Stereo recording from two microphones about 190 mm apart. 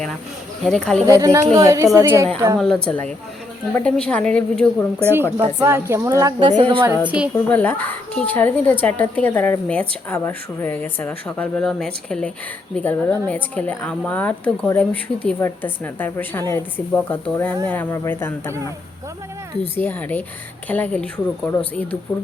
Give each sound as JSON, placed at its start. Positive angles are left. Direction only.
{"t": 0.6, "sound": "a woman's voice", "side_deg": 5}
{"t": 1.0, "sound": "speech", "side_deg": -15}
{"t": 2.6, "sound": "a woman's voice", "side_deg": 5}
{"t": 5.5, "sound": "speech", "side_deg": -15}
{"t": 6.6, "sound": "music", "side_deg": -25}
{"t": 7.2, "sound": "a woman's voice", "side_deg": -5}
{"t": 7.5, "sound": "a woman's voice", "side_deg": 10}
{"t": 19.7, "sound": "a woman's voice", "side_deg": 10}